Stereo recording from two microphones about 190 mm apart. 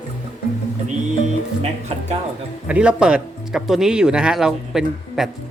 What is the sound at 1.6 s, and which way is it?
Speech, 35° right (ahead or behind).